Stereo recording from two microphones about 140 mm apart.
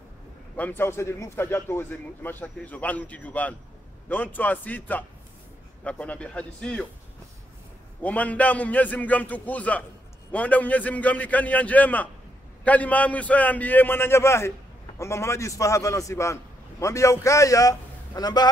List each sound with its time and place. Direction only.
0.6 s a man's voice: 15° left (ahead or behind)
8.0 s a man's voice: 10° left (ahead or behind); by 18.5 s 30° left (ahead or behind)